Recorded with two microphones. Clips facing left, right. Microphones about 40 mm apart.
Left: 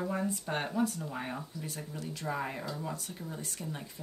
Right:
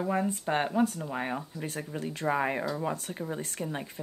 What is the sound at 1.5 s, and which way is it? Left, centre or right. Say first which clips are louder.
Speech: right 5 dB; right.